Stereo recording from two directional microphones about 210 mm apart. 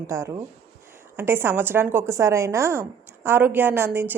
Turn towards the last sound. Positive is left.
turn(degrees=-10)  # may be behind; listen again after turning